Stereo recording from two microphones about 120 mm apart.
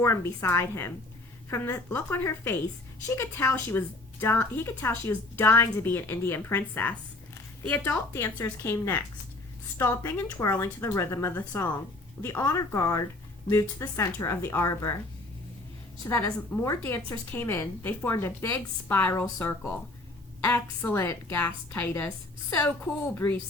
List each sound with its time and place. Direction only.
0.0 s a woman's voice: 20° left (ahead or behind)
8.1 s a woman's voice: 25° left (ahead or behind)
16.0 s a woman's voice: 15° left (ahead or behind)